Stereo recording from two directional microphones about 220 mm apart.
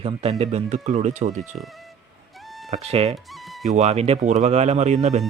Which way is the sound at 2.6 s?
30° right (ahead or behind).